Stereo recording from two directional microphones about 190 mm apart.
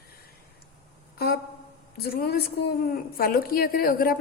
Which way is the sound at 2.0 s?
55° left (ahead or behind).